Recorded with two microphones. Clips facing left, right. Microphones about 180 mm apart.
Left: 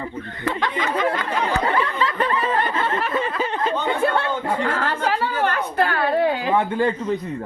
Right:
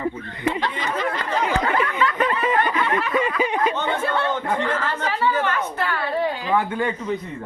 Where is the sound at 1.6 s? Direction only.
30° left (ahead or behind).